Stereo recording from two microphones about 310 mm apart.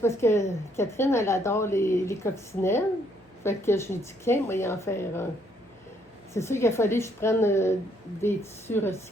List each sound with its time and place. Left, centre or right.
0.0 s a woman's voice: centre
6.3 s a woman's voice: centre